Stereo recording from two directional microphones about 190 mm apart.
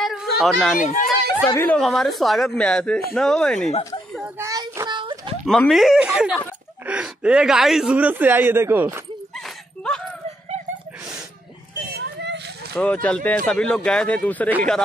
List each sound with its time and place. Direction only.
0.0 s a sound: centre (ahead or behind)
0.4 s speech: centre (ahead or behind)
0.7 s speech: 45° left (ahead or behind)
1.5 s speech: 10° left (ahead or behind)
4.4 s a sound: 15° right (ahead or behind)
5.4 s speech: centre (ahead or behind)
12.0 s vehicle: 65° right (ahead or behind)
12.7 s speech: 10° left (ahead or behind)